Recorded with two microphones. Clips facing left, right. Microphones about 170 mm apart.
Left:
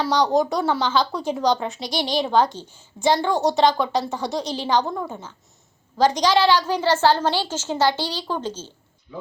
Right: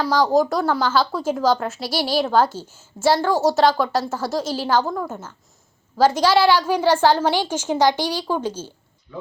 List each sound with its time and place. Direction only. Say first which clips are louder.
0.0 s a woman's voice: right 2 dB; centre (ahead or behind)